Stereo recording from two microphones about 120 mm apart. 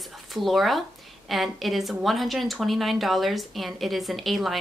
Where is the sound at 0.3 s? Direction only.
Centre (ahead or behind).